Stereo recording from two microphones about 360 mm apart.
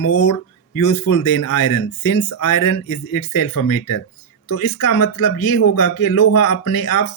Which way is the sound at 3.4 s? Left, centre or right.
Left.